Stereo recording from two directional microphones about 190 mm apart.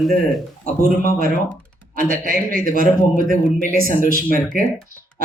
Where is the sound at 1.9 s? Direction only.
45° right (ahead or behind).